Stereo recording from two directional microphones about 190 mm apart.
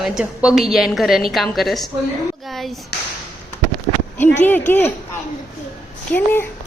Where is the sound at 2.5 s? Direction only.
Centre (ahead or behind).